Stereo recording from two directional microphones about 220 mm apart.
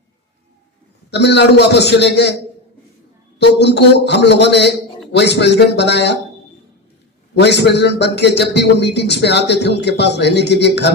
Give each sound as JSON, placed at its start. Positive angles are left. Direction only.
{"t": 1.1, "sound": "a man's voice", "side_deg": 50}
{"t": 3.3, "sound": "a man's voice", "side_deg": 50}
{"t": 7.3, "sound": "a man's voice", "side_deg": 50}